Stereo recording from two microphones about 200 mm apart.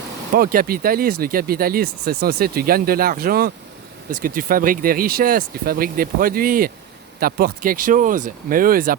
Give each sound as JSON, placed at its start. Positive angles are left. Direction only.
{"t": 0.3, "sound": "speech", "side_deg": -45}